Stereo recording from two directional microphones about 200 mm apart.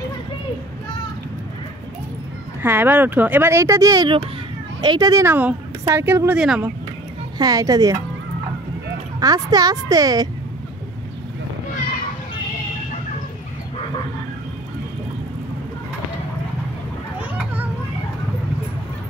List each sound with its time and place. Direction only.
2.6 s a woman's voice: 10° right (ahead or behind)
7.3 s a woman's voice: 20° right (ahead or behind)
9.2 s a woman's voice: 20° right (ahead or behind)